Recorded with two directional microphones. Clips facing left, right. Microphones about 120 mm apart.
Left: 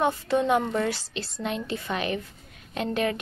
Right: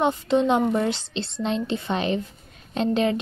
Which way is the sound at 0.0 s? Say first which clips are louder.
Right 3 dB; 20° right (ahead or behind).